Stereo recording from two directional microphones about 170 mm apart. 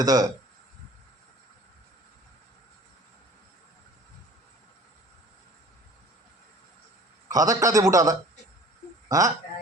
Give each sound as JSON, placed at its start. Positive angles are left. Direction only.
{"t": 0.0, "sound": "a man's voice", "side_deg": -20}
{"t": 7.3, "sound": "a man's voice", "side_deg": -20}